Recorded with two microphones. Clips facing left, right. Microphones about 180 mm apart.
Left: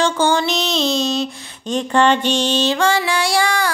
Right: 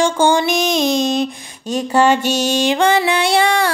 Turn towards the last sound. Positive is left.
turn(degrees=-25)  # may be behind; listen again after turning